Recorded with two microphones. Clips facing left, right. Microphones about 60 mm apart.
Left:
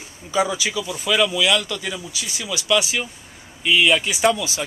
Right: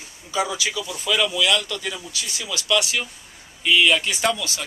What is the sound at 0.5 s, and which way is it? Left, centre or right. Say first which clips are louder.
Speech: left 2 dB; centre.